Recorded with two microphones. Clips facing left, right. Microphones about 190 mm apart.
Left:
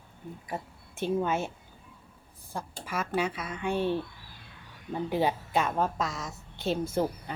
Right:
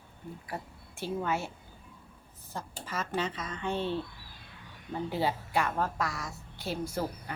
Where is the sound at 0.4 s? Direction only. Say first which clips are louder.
Left 4 dB; 20° left (ahead or behind).